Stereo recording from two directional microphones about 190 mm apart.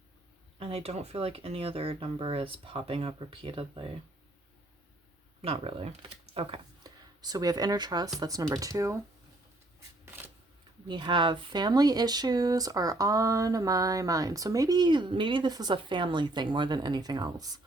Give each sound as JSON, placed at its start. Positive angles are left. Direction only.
{"t": 0.6, "sound": "speech", "side_deg": -30}
{"t": 5.4, "sound": "speech", "side_deg": -30}
{"t": 10.8, "sound": "speech", "side_deg": -25}